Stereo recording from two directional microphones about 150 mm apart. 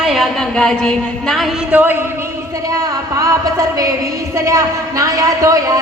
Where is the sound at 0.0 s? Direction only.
Centre (ahead or behind).